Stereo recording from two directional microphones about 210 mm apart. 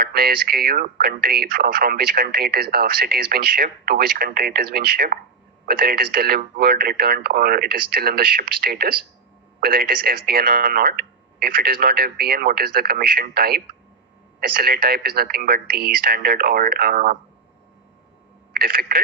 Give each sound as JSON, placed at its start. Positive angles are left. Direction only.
{"t": 0.0, "sound": "speech", "side_deg": -45}
{"t": 18.5, "sound": "speech", "side_deg": -45}